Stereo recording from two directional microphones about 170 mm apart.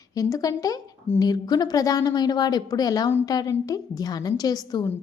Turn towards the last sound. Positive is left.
turn(degrees=25)  # may be behind; listen again after turning